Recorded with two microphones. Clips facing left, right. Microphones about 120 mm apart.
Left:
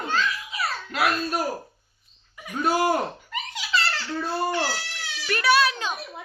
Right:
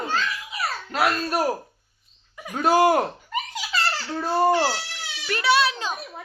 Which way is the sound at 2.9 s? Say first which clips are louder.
Right 3 dB; 40° right (ahead or behind).